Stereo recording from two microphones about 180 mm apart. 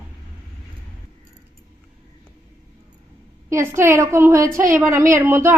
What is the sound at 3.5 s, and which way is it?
A woman's voice, 15° right (ahead or behind).